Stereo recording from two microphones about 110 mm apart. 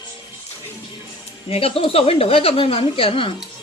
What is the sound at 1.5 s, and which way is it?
A woman's voice, 60° left (ahead or behind).